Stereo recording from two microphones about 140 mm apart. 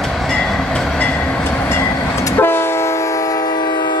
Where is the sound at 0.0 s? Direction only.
Centre (ahead or behind).